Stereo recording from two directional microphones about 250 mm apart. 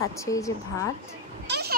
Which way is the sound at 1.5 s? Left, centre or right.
Right.